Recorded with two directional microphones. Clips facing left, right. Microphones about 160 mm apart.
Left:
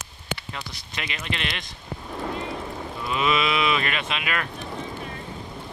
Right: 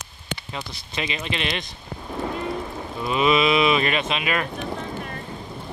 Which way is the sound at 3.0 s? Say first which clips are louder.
Right 5 dB; 20° right (ahead or behind).